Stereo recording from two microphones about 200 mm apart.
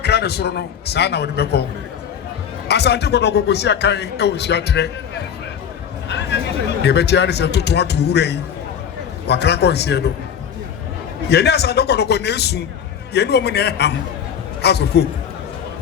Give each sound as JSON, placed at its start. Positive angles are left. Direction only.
{"t": 0.0, "sound": "speech", "side_deg": 55}
{"t": 2.6, "sound": "speech", "side_deg": 55}
{"t": 6.1, "sound": "a sound", "side_deg": 60}
{"t": 6.8, "sound": "speech", "side_deg": 55}
{"t": 11.3, "sound": "a man's voice", "side_deg": 55}